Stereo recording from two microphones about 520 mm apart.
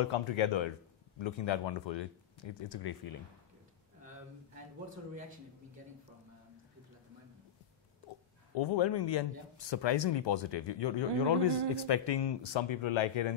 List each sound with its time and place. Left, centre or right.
0.0 s speech: left
8.5 s speech: left